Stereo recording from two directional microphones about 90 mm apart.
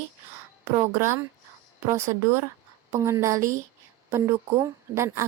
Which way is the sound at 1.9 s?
35° right (ahead or behind).